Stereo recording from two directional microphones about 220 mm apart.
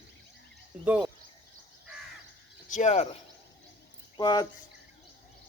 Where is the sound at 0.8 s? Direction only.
5° right (ahead or behind).